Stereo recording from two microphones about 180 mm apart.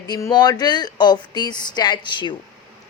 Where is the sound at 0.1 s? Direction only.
20° left (ahead or behind).